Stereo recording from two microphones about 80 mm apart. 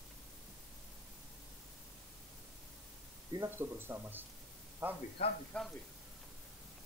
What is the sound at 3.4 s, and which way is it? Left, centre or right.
Speech, right.